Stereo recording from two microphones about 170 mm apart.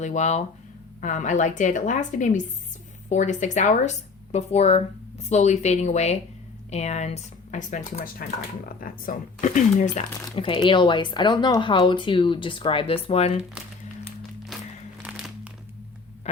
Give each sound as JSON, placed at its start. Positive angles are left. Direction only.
{"t": 0.0, "sound": "speech", "side_deg": 45}
{"t": 10.3, "sound": "speech", "side_deg": 30}
{"t": 15.0, "sound": "crumpling", "side_deg": -5}
{"t": 16.3, "sound": "hum", "side_deg": 40}